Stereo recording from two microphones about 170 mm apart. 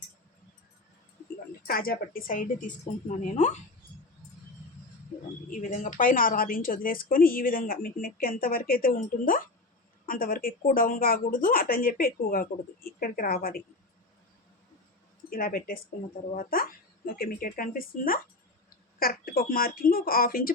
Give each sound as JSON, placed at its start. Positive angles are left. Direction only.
{"t": 1.6, "sound": "a woman's voice", "side_deg": 60}
{"t": 5.5, "sound": "a woman's voice", "side_deg": 45}
{"t": 15.3, "sound": "a woman's voice", "side_deg": 60}